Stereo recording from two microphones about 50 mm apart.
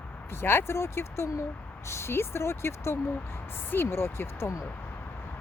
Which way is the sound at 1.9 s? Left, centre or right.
Left.